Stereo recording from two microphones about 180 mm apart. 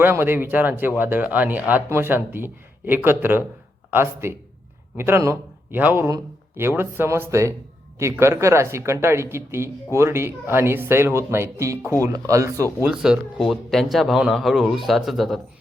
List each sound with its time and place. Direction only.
0.0 s speech: 10° right (ahead or behind)
12.9 s a man's voice: 5° right (ahead or behind)